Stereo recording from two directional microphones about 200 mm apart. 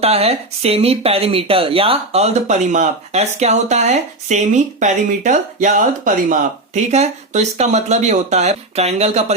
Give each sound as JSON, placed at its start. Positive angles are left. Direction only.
{"t": 0.0, "sound": "speech", "side_deg": -30}